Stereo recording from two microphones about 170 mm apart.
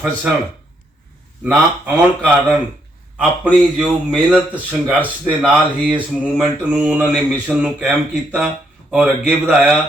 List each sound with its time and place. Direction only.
1.5 s a man's voice: 10° right (ahead or behind)